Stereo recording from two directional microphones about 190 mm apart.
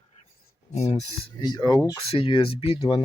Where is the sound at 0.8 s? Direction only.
35° left (ahead or behind).